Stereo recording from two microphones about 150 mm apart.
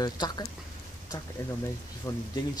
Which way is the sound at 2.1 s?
20° left (ahead or behind).